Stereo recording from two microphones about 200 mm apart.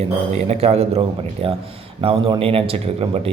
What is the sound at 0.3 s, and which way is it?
A man's voice, 30° right (ahead or behind).